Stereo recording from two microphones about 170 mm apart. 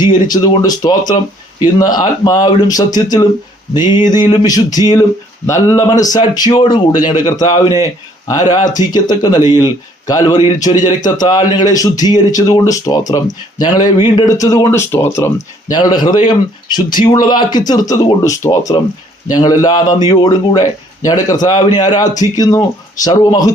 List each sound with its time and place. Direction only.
0.3 s a man's voice: 25° left (ahead or behind)